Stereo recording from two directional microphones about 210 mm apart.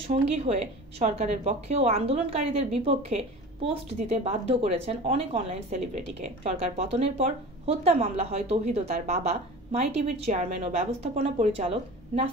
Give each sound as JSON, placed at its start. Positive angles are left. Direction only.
{"t": 0.1, "sound": "a woman's voice", "side_deg": -30}